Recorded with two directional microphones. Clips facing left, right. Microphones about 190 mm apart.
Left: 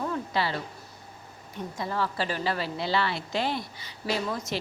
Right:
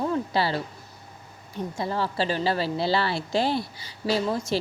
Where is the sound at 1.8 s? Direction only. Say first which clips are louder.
Right 3 dB; 30° right (ahead or behind).